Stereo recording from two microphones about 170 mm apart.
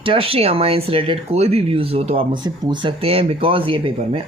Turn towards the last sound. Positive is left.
turn(degrees=-30)  # may be behind; listen again after turning